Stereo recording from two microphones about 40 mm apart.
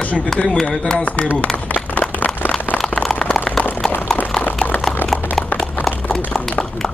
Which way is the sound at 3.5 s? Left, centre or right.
Centre.